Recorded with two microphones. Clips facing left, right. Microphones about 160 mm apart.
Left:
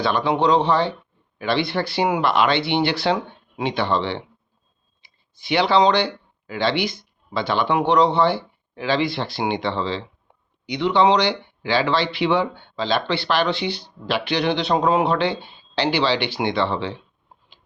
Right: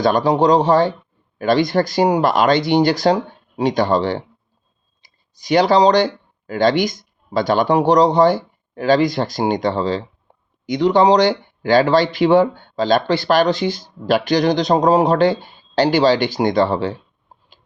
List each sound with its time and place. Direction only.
0.0 s speech: 40° right (ahead or behind)
10.3 s a sound: 35° right (ahead or behind)
10.7 s speech: 40° right (ahead or behind)